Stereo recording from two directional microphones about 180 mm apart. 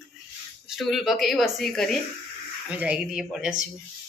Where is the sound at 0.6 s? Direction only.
Centre (ahead or behind).